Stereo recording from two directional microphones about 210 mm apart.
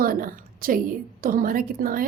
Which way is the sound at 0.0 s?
45° right (ahead or behind).